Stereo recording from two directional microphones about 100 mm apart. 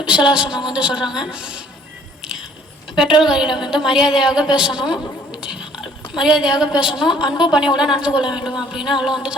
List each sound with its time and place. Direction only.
0.0 s a woman's voice: 10° right (ahead or behind)
2.2 s a sound: 5° right (ahead or behind)
2.9 s a woman's voice: 5° right (ahead or behind)
5.3 s a sound: 10° right (ahead or behind)
7.0 s a woman's voice: 10° right (ahead or behind)
8.4 s music: 5° right (ahead or behind)
9.0 s a woman's voice: 5° right (ahead or behind)